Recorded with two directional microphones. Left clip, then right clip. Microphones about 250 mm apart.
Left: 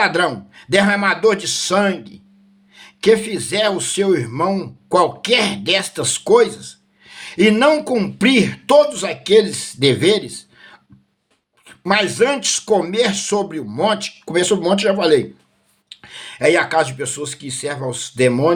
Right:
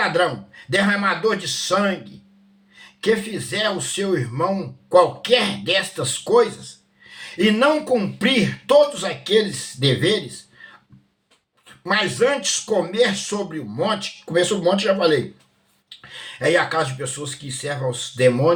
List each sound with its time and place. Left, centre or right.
0.0 s speech: left
3.0 s speech: left
11.6 s speech: left